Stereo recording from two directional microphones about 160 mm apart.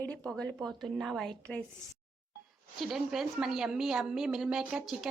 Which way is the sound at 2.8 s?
Centre (ahead or behind).